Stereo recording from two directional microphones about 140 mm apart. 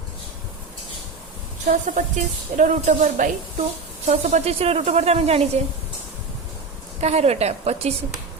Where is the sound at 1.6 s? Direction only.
65° right (ahead or behind); by 5.5 s 45° right (ahead or behind).